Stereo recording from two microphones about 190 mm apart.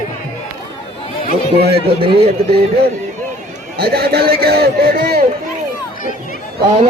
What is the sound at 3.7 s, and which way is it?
A man's voice, 55° right (ahead or behind).